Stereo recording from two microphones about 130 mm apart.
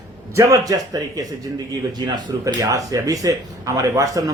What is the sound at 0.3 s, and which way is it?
A man's voice, 25° right (ahead or behind).